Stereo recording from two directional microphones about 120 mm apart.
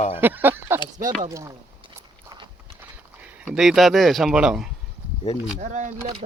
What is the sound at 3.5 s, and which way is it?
Speech, centre (ahead or behind).